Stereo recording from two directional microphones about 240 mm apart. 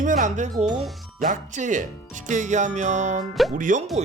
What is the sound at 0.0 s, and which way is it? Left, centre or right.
Speech, right.